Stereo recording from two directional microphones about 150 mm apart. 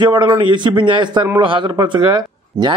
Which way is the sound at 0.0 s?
30° right (ahead or behind).